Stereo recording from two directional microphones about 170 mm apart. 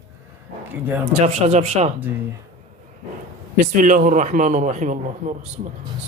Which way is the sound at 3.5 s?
50° right (ahead or behind).